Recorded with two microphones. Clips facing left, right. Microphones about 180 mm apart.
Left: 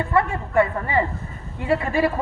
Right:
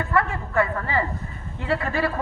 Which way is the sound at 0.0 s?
25° left (ahead or behind).